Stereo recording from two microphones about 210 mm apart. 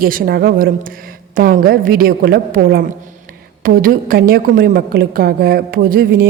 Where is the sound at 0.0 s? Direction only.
45° right (ahead or behind).